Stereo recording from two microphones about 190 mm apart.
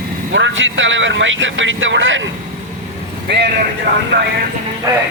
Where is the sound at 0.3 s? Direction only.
75° right (ahead or behind).